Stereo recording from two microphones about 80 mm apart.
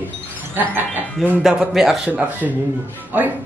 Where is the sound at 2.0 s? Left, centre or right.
Centre.